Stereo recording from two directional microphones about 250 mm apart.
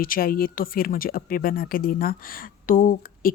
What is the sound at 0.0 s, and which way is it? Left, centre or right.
Speech, left.